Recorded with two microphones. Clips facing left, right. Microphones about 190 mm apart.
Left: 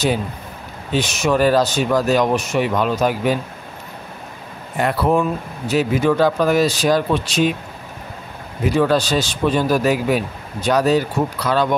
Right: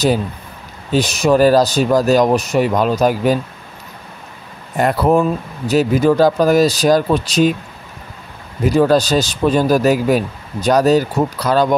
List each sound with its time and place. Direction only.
0.9 s speech: 35° right (ahead or behind)
4.7 s speech: 40° right (ahead or behind)
8.6 s speech: 40° right (ahead or behind)